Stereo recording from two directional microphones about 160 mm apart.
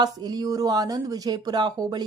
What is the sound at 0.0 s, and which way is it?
A woman's voice, 20° right (ahead or behind).